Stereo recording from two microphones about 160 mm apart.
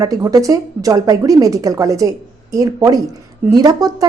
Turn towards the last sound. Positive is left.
turn(degrees=-25)  # may be behind; listen again after turning